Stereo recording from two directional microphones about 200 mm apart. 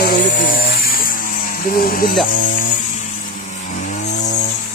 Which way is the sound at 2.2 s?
40° left (ahead or behind).